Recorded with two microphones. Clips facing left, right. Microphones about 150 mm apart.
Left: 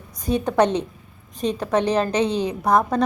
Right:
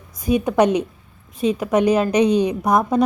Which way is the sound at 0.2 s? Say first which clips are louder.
Right 2 dB; 10° right (ahead or behind).